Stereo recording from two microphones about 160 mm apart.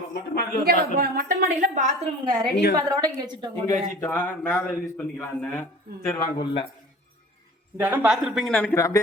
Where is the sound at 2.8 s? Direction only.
25° right (ahead or behind).